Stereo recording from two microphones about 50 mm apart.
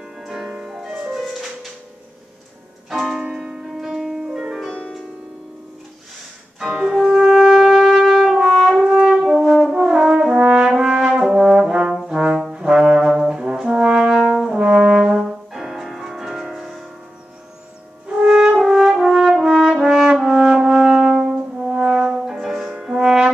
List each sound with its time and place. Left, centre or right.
0.0 s music: centre
2.9 s music: centre
6.6 s wind instrument: centre
9.3 s french horn: centre
9.8 s brass instrument: centre
18.0 s french horn: centre
18.6 s french horn: centre
20.2 s brass instrument: centre
20.7 s french horn: centre